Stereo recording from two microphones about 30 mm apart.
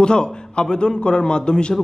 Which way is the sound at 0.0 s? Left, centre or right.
Left.